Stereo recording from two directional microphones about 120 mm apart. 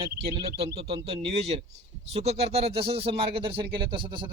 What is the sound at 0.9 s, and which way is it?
Speech, 60° right (ahead or behind).